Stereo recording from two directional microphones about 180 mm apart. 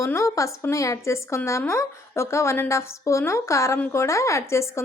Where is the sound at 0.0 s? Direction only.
15° left (ahead or behind).